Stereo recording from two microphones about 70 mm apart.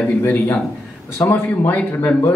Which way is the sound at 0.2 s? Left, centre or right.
Left.